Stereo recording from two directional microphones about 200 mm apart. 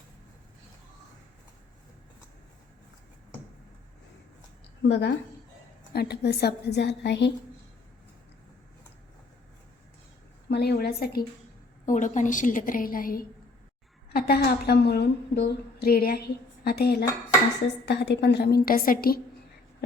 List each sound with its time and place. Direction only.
4.8 s a woman's voice: 60° left (ahead or behind)
10.5 s a woman's voice: 50° left (ahead or behind)
11.9 s a woman's voice: 40° left (ahead or behind)